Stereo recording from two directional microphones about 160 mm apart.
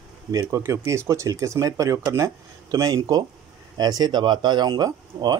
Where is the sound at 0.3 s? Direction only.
20° right (ahead or behind).